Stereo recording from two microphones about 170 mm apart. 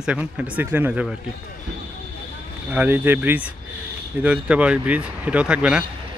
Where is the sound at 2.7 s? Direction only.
10° right (ahead or behind).